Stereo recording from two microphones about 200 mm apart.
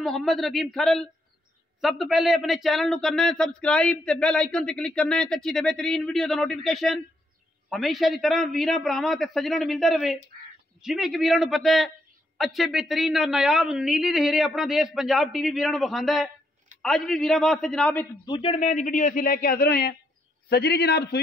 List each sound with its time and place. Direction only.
0.0 s speech: centre (ahead or behind)
18.2 s a man's voice: 25° left (ahead or behind); by 21.2 s 55° left (ahead or behind)